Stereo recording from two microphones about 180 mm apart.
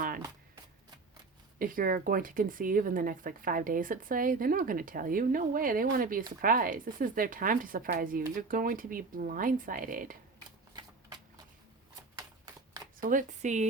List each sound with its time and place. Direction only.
1.5 s speech: 50° right (ahead or behind)
12.1 s shuffling cards: 20° right (ahead or behind)
13.0 s speech: 45° right (ahead or behind)